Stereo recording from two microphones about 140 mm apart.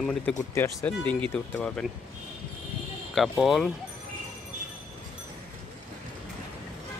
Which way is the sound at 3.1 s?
Centre (ahead or behind).